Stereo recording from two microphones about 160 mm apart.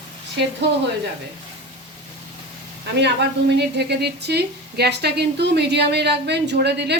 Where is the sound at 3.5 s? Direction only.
90° right.